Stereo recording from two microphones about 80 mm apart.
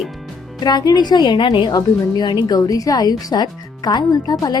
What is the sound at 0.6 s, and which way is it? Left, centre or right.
Speech, left.